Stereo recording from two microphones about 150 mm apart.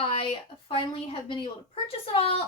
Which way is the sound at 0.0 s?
35° left (ahead or behind).